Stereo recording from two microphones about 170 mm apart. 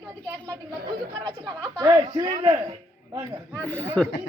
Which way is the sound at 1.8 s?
25° right (ahead or behind).